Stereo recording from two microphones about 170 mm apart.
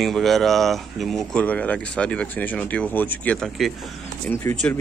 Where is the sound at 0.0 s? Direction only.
Centre (ahead or behind).